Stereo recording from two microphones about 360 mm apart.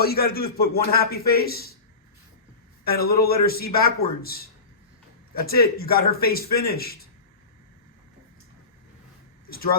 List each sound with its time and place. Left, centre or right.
0.0 s a man's voice: left
2.8 s a man's voice: left